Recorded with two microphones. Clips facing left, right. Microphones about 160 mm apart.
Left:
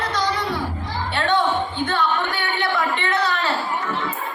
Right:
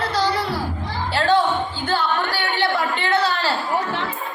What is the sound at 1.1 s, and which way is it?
Music, 35° right (ahead or behind).